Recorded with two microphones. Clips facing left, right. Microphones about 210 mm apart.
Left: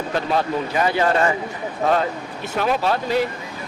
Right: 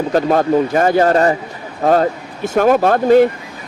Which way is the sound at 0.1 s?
45° right (ahead or behind).